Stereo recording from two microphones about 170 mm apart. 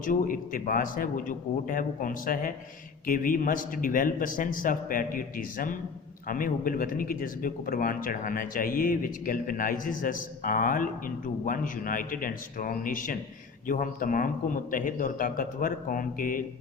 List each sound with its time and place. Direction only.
0.0 s speech: 55° left (ahead or behind)